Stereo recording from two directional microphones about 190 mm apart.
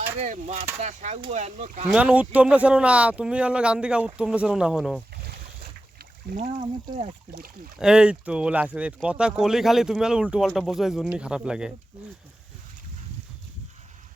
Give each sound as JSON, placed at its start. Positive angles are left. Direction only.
{"t": 0.2, "sound": "speech", "side_deg": -35}
{"t": 1.9, "sound": "speech", "side_deg": -5}
{"t": 6.2, "sound": "speech", "side_deg": -45}
{"t": 7.8, "sound": "speech", "side_deg": -5}